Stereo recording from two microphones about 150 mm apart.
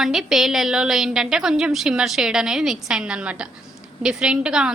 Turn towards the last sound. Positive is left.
turn(degrees=-5)  # may be behind; listen again after turning